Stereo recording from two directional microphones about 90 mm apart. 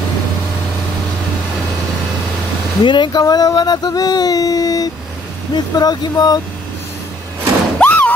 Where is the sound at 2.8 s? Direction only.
60° left (ahead or behind).